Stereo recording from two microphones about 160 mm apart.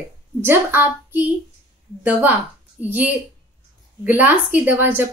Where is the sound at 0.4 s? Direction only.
15° right (ahead or behind).